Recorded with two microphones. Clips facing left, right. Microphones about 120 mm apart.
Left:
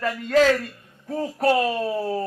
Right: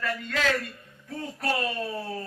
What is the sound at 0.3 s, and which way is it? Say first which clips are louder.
A man's voice: left 12 dB; 35° left (ahead or behind).